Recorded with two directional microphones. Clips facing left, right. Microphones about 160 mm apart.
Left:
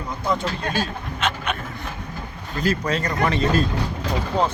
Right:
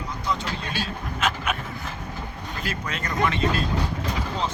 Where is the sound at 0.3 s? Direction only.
50° left (ahead or behind).